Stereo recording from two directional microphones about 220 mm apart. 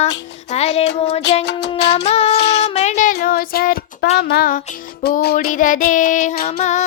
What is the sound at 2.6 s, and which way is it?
Music, 30° left (ahead or behind).